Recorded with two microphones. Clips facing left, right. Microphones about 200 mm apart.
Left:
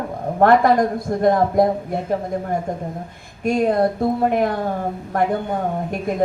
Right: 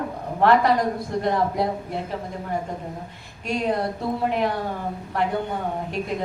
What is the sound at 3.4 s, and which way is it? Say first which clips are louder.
A man's voice: left 7 dB; 50° left (ahead or behind).